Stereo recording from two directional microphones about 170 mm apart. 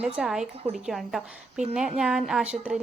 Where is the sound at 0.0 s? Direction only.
5° right (ahead or behind).